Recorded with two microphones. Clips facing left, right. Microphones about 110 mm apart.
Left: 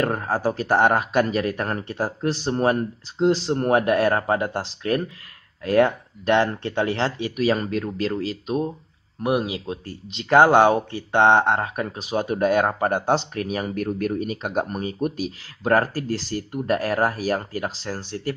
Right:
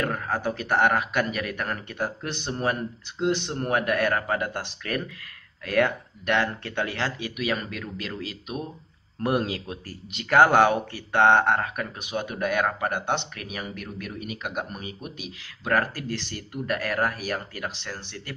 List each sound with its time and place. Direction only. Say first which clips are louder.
0.0 s speech: left 5 dB; 35° left (ahead or behind)
9.2 s speech: left 2 dB; 15° left (ahead or behind)
9.7 s speech: left 5 dB; 25° left (ahead or behind)